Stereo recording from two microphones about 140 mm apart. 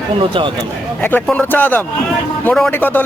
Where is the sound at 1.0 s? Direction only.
10° left (ahead or behind).